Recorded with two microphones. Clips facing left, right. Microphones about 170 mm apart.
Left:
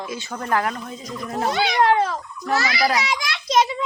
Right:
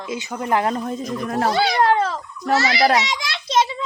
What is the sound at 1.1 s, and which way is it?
Speech, 65° right (ahead or behind).